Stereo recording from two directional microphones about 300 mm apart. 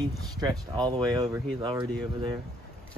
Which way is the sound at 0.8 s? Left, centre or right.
Centre.